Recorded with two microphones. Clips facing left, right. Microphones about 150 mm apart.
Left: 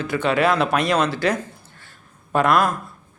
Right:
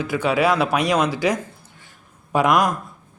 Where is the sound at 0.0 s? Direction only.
10° right (ahead or behind).